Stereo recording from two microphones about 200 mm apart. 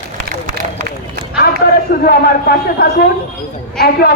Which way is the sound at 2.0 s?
50° left (ahead or behind).